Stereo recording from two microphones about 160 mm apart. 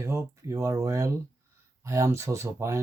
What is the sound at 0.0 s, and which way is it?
Speech, 20° right (ahead or behind).